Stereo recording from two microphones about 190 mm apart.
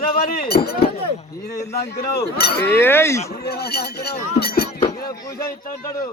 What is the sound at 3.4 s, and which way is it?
Speech, 55° left (ahead or behind).